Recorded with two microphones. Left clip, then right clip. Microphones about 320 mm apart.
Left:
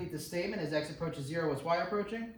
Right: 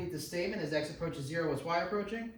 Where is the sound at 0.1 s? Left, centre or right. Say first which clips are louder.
Right 1 dB; centre.